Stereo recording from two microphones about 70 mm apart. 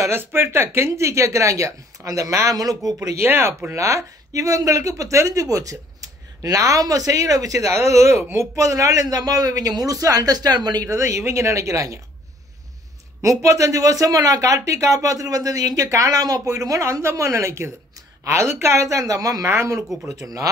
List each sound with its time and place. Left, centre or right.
0.1 s a man's voice: right
3.2 s a man's voice: right
10.9 s speech: right
13.2 s speech: right
19.4 s speech: right